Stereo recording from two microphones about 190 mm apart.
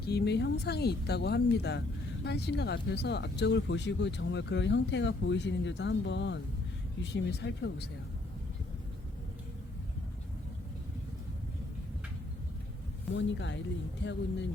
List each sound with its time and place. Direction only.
0.0 s speech: 60° left (ahead or behind)
13.1 s speech: 70° left (ahead or behind)